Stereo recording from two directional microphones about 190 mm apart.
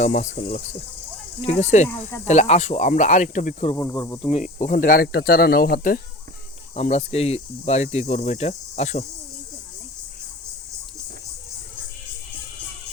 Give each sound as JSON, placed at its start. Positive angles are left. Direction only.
{"t": 0.0, "sound": "speech", "side_deg": 40}
{"t": 3.8, "sound": "speech", "side_deg": 15}
{"t": 4.2, "sound": "speech", "side_deg": 35}
{"t": 6.7, "sound": "speech", "side_deg": 35}